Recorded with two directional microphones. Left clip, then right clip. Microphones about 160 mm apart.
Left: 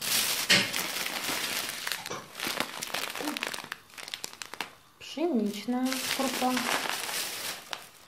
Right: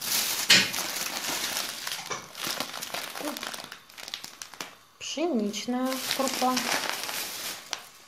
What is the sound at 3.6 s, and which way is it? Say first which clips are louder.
Crumpling: left 1 dB; 5° left (ahead or behind).